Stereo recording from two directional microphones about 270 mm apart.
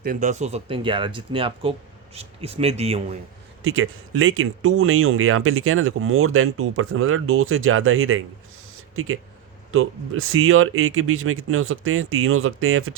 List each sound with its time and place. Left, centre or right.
0.0 s speech: right
3.6 s speech: right
9.7 s speech: right